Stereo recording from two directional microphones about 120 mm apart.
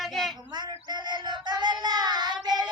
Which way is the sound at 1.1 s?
35° right (ahead or behind).